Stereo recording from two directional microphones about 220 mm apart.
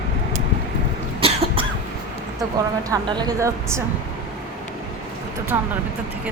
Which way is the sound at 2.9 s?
20° right (ahead or behind).